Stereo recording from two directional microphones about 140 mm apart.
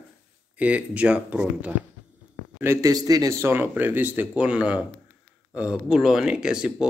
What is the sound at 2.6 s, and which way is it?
Speech, 20° right (ahead or behind).